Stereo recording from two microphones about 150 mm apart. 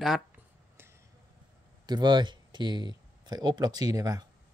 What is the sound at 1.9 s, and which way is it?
Speech, 30° right (ahead or behind).